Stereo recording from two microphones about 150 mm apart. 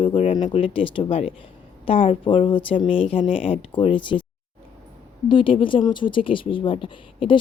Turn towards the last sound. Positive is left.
turn(degrees=35)  # may be behind; listen again after turning